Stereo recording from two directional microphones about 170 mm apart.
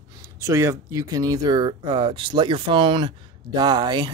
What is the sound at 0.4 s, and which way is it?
Speech, 15° right (ahead or behind).